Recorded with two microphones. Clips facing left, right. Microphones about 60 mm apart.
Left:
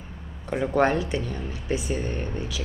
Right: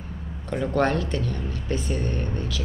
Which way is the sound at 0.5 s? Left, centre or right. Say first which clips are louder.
Left 1 dB; centre.